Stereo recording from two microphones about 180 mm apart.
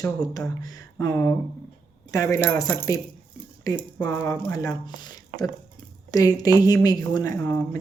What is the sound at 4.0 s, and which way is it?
Speech, 15° left (ahead or behind).